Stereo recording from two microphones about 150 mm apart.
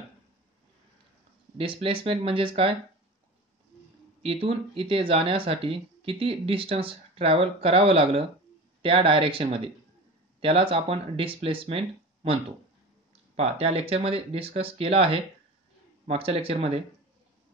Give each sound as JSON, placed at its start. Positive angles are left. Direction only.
{"t": 1.6, "sound": "speech", "side_deg": -35}
{"t": 4.2, "sound": "speech", "side_deg": -40}